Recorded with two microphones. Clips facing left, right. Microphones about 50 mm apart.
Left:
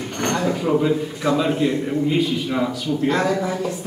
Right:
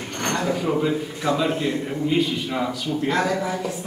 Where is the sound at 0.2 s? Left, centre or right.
Centre.